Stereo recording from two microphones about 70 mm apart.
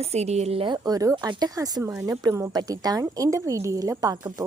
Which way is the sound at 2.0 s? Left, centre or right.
Right.